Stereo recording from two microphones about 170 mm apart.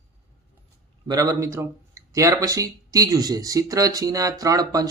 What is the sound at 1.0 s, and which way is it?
Speech, 20° right (ahead or behind).